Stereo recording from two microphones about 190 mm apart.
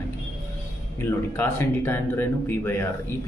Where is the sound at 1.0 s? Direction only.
15° left (ahead or behind).